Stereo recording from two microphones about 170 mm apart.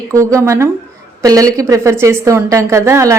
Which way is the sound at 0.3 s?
15° right (ahead or behind).